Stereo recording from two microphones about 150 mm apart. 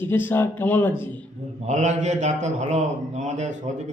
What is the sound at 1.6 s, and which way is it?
A man's voice, 50° right (ahead or behind).